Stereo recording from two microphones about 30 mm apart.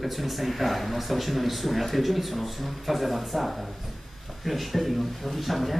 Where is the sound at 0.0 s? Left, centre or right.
Centre.